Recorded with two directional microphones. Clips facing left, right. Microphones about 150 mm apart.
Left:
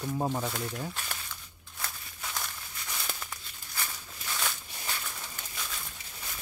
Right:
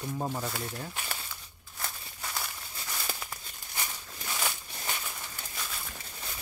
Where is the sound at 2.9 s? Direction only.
5° right (ahead or behind).